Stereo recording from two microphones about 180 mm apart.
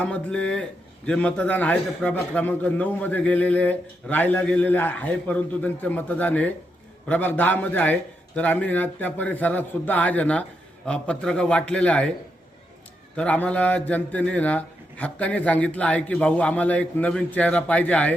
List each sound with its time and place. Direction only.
0.0 s a man's voice: 5° left (ahead or behind)
13.1 s a man's voice: 10° left (ahead or behind)